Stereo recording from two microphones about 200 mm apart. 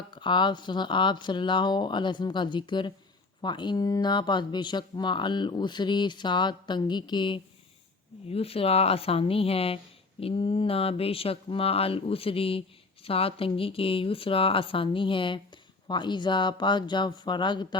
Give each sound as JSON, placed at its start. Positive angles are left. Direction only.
{"t": 0.1, "sound": "speech", "side_deg": 25}